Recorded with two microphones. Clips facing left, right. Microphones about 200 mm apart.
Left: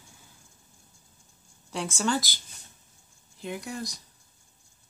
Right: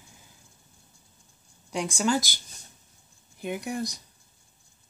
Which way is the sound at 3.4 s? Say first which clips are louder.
Right 4 dB; 15° right (ahead or behind).